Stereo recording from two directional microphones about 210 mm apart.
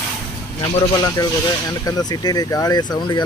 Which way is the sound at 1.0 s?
15° left (ahead or behind).